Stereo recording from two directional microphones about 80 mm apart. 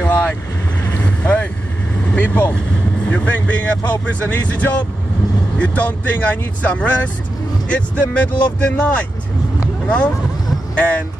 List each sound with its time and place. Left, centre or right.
0.0 s vehicle: left
3.1 s speech: centre